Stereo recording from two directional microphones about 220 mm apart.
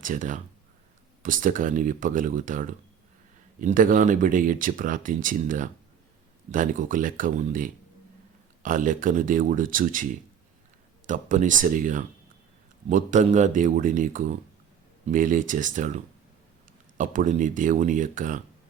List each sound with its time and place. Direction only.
0.0 s speech: 35° right (ahead or behind)
17.0 s speech: 35° right (ahead or behind)